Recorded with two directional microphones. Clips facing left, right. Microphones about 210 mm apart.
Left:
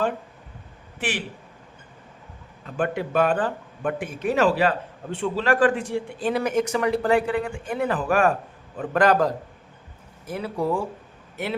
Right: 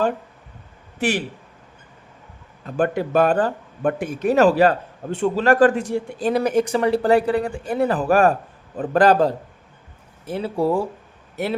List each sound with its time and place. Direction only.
0.9 s a man's voice: 40° right (ahead or behind)
2.6 s speech: 40° right (ahead or behind)